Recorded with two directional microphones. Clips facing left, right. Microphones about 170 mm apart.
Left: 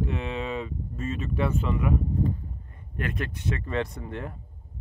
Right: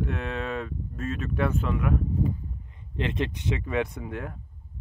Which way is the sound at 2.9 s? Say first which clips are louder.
Right 3 dB; 20° right (ahead or behind).